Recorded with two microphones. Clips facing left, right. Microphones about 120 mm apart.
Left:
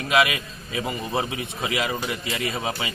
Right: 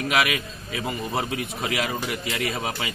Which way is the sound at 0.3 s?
20° left (ahead or behind).